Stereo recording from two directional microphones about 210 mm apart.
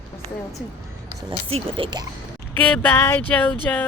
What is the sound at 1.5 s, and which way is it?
Speech, 25° right (ahead or behind).